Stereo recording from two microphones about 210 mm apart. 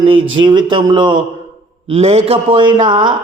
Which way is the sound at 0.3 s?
20° right (ahead or behind).